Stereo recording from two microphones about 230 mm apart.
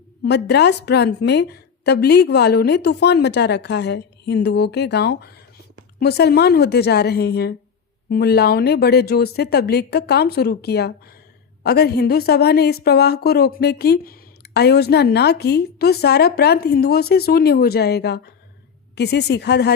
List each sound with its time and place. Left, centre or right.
0.2 s a woman's voice: left